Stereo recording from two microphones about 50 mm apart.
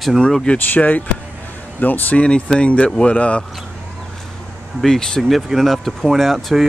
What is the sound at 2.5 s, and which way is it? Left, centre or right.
Speech, left.